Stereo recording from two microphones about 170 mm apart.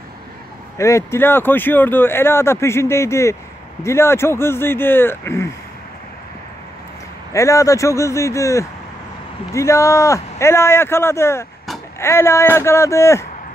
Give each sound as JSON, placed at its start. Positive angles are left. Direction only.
{"t": 0.7, "sound": "speech", "side_deg": 15}
{"t": 7.3, "sound": "speech", "side_deg": 20}